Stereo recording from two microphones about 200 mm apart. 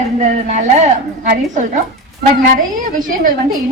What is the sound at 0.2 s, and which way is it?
A woman's voice, 35° right (ahead or behind).